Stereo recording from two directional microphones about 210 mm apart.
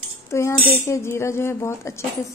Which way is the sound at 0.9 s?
10° left (ahead or behind).